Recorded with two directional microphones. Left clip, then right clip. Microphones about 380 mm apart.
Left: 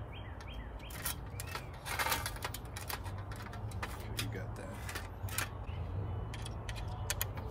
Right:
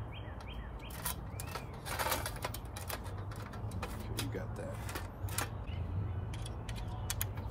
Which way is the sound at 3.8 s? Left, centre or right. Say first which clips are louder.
Left 1 dB; centre.